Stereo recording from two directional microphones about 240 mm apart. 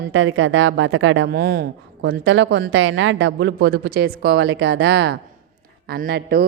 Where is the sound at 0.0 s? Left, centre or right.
Right.